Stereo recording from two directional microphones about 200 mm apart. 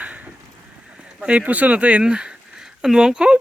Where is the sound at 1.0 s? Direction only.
5° right (ahead or behind).